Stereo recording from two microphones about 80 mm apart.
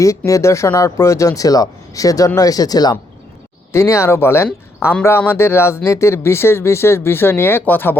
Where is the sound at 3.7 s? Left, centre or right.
Left.